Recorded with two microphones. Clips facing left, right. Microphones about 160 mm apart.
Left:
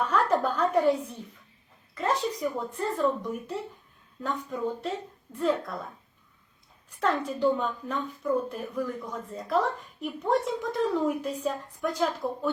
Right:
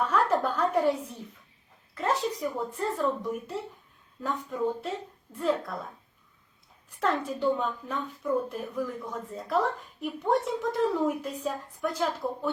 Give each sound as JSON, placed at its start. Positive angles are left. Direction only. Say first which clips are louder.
{"t": 0.0, "sound": "a sound", "louder": "left 1 dB", "side_deg": 0}
{"t": 2.0, "sound": "a woman's voice", "louder": "left 1 dB", "side_deg": 0}
{"t": 7.0, "sound": "a woman's voice", "louder": "left 2 dB", "side_deg": 0}